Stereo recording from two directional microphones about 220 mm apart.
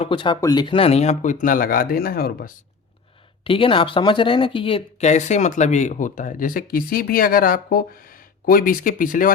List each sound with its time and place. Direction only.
0.0 s speech: 25° left (ahead or behind); by 2.5 s 40° left (ahead or behind)
3.4 s speech: 25° left (ahead or behind)